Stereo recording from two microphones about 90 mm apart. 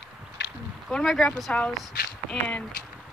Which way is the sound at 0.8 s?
Centre (ahead or behind).